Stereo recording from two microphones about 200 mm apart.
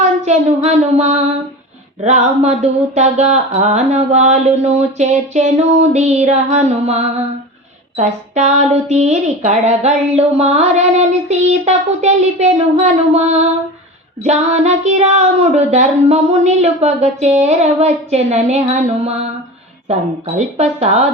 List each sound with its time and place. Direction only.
0.3 s speech: 35° right (ahead or behind)